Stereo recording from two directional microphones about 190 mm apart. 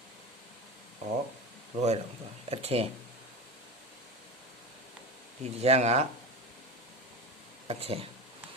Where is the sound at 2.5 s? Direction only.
30° right (ahead or behind).